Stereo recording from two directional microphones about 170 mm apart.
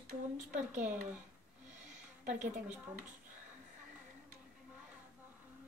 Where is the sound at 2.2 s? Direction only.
50° right (ahead or behind).